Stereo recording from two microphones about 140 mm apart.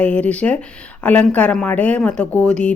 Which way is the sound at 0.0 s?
10° left (ahead or behind).